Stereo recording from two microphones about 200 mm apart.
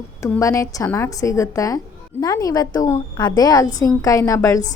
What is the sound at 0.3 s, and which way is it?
A woman's voice, 15° left (ahead or behind).